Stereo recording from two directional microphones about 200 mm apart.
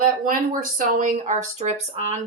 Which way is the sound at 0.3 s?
40° right (ahead or behind).